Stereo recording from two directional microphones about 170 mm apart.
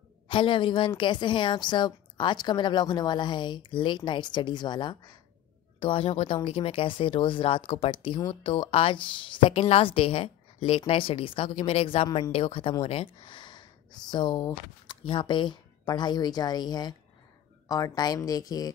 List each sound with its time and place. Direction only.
0.3 s a woman's voice: 30° left (ahead or behind)